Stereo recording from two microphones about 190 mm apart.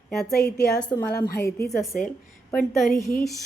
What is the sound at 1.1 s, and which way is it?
Speech, 55° left (ahead or behind).